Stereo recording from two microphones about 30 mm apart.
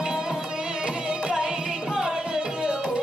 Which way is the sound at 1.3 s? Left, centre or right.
Right.